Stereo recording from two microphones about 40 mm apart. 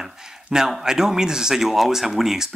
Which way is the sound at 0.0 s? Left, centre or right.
Centre.